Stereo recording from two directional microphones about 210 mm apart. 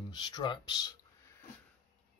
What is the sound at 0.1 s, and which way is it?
Speech, 20° left (ahead or behind).